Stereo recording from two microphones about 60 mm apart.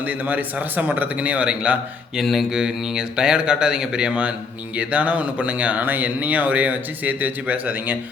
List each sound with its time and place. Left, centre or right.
0.0 s speech: right
2.2 s speech: centre; by 7.9 s right